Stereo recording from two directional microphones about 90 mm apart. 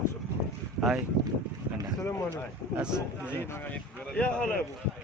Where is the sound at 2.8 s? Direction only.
10° right (ahead or behind).